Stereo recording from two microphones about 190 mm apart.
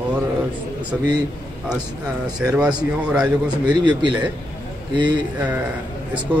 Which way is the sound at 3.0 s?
5° right (ahead or behind).